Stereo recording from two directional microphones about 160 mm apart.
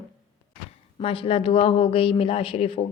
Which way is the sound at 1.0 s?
35° left (ahead or behind).